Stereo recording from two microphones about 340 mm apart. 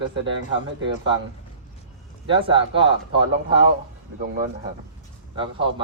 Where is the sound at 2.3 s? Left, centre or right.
Centre.